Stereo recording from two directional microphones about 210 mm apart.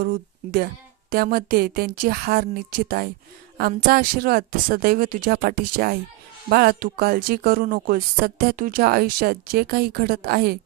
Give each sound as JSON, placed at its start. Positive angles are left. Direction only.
{"t": 0.0, "sound": "speech", "side_deg": -45}